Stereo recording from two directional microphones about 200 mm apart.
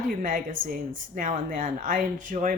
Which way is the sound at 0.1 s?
40° right (ahead or behind).